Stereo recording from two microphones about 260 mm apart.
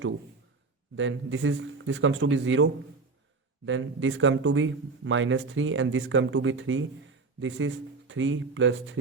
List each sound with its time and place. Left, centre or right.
0.9 s a man's voice: right
3.7 s a man's voice: right